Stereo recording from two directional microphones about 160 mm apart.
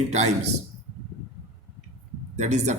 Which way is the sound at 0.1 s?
45° right (ahead or behind).